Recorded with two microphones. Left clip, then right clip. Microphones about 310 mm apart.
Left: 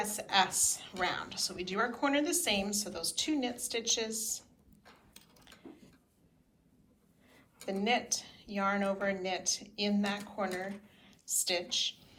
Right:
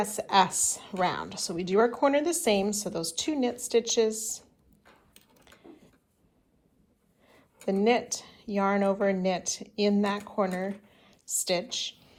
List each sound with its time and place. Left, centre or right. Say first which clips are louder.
0.0 s a woman's voice: right 6 dB; centre
7.3 s a woman's voice: right 8 dB; centre
10.9 s a sound: right 2 dB; centre